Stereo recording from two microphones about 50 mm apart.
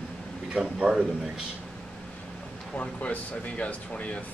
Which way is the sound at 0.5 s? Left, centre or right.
Centre.